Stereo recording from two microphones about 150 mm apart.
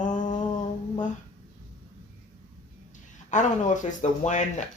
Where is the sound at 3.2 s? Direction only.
55° left (ahead or behind).